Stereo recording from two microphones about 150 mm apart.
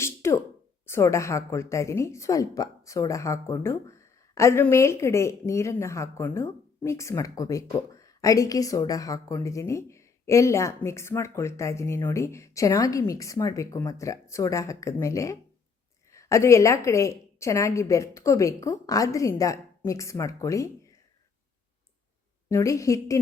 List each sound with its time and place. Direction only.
0.0 s a sound: 20° left (ahead or behind)
0.9 s a woman's voice: 20° left (ahead or behind)
22.4 s a woman's voice: 20° left (ahead or behind)